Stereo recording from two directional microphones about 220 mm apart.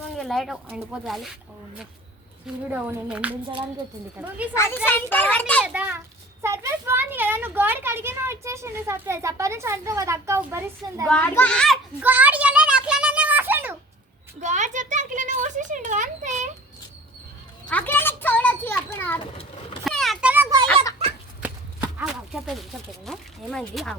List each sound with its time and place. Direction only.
0.2 s speech: centre (ahead or behind)
2.6 s a woman's voice: 10° right (ahead or behind)
4.5 s a child's voice: 15° left (ahead or behind)
5.6 s a sound: 5° right (ahead or behind)
6.4 s speech: 10° right (ahead or behind)
11.1 s speech: 5° left (ahead or behind)
12.0 s a sound: 5° right (ahead or behind)
14.4 s speech: 35° right (ahead or behind)
17.7 s children playing: 5° left (ahead or behind); by 20.6 s 10° right (ahead or behind)
21.4 s a sound: 5° right (ahead or behind)
23.0 s speech: centre (ahead or behind)